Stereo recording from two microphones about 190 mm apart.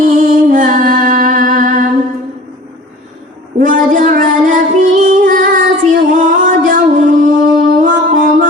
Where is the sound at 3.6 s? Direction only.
45° right (ahead or behind).